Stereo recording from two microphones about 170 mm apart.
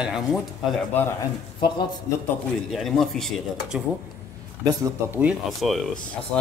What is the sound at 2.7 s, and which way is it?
A man's voice, centre (ahead or behind).